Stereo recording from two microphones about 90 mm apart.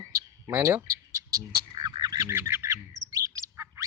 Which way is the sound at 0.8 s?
40° right (ahead or behind).